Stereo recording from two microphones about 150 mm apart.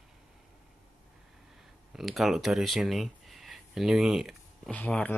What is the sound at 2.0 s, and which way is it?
Speech, centre (ahead or behind).